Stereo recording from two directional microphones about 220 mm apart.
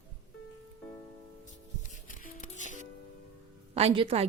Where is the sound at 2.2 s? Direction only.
35° left (ahead or behind).